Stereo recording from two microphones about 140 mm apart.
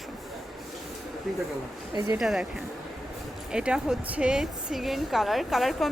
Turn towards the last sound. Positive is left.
turn(degrees=0)  # may be behind; listen again after turning